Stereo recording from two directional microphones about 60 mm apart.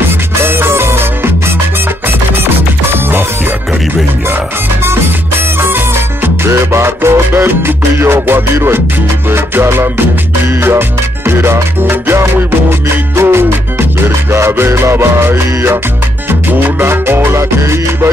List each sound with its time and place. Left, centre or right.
0.4 s music: right
6.2 s music: right